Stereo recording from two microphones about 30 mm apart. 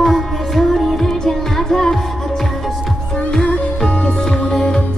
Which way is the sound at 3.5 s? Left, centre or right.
Left.